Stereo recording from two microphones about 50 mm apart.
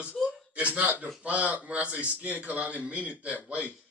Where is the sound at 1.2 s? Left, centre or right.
Right.